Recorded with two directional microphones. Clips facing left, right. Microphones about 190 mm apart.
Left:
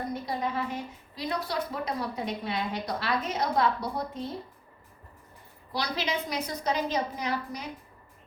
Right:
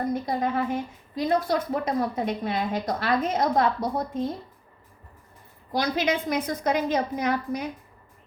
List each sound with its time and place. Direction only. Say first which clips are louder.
0.1 s a woman's voice: right 5 dB; 50° right (ahead or behind)
5.7 s a woman's voice: right 6 dB; 50° right (ahead or behind)